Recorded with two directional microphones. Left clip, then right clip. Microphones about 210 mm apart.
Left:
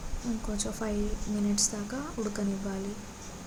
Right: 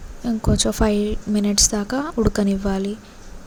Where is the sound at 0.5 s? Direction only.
40° right (ahead or behind).